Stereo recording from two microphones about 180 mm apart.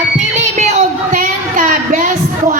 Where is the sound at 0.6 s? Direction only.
40° right (ahead or behind).